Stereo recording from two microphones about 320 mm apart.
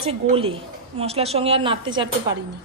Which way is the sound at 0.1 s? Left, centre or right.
Centre.